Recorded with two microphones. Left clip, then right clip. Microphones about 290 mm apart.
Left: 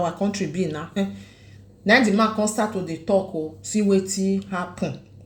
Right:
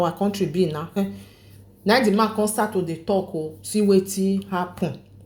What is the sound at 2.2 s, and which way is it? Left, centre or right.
A woman's voice, right.